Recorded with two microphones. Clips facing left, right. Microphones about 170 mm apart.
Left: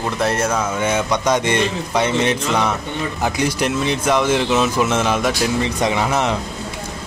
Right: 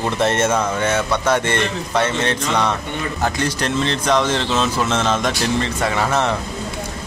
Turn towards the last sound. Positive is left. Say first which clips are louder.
# even
turn(degrees=15)  # may be behind; listen again after turning